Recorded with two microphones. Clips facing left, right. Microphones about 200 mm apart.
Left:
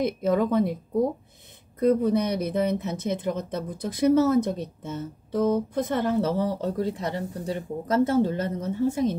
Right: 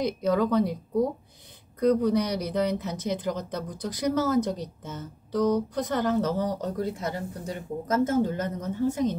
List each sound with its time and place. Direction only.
0.0 s speech: 25° left (ahead or behind)
1.8 s speech: 25° left (ahead or behind)